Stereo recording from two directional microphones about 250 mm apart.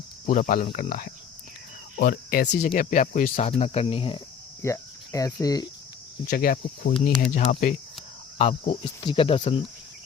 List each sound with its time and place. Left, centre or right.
0.3 s speech: left
4.6 s cricket: centre
6.2 s speech: left